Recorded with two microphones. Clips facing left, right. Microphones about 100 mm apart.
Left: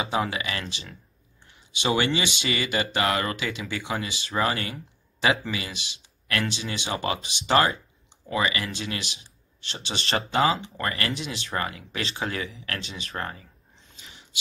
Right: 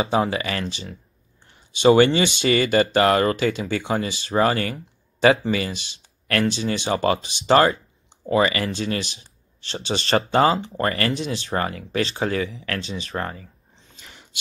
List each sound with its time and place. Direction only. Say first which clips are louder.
0.0 s speech: right 6 dB; 35° right (ahead or behind)